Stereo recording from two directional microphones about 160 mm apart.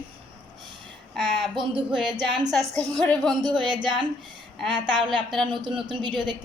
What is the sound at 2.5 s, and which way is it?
Speech, 5° left (ahead or behind).